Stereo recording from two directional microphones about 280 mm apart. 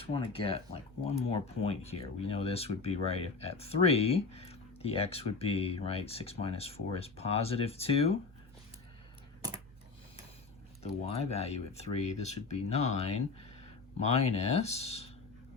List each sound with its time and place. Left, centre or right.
0.0 s speech: centre
11.0 s speech: left
14.1 s speech: left